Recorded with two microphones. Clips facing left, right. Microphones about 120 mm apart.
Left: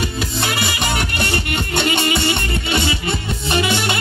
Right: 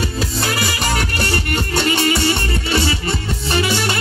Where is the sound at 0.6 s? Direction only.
35° right (ahead or behind).